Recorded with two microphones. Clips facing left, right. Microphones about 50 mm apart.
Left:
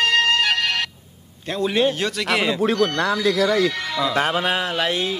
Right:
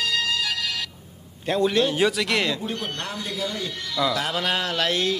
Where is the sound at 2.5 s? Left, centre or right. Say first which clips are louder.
Left 11 dB; left.